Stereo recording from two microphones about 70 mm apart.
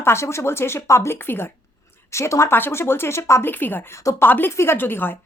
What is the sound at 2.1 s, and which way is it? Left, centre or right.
A woman's voice, left.